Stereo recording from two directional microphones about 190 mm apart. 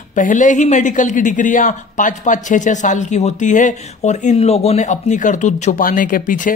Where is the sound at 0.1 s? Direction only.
40° left (ahead or behind).